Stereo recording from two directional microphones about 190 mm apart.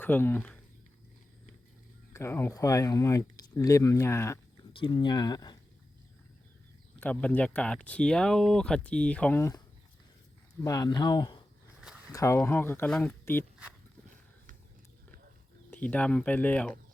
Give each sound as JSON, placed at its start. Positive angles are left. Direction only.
{"t": 0.0, "sound": "speech", "side_deg": 10}
{"t": 2.1, "sound": "speech", "side_deg": 15}
{"t": 4.7, "sound": "speech", "side_deg": 25}
{"t": 7.0, "sound": "speech", "side_deg": 5}
{"t": 10.6, "sound": "speech", "side_deg": 20}
{"t": 15.7, "sound": "speech", "side_deg": 5}